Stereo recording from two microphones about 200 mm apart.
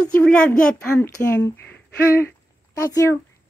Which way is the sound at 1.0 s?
15° left (ahead or behind).